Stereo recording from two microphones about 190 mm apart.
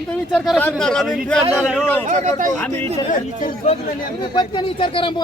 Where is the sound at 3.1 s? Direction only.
45° left (ahead or behind).